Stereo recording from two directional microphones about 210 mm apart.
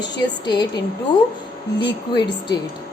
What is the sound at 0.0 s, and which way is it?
Speech, 20° left (ahead or behind).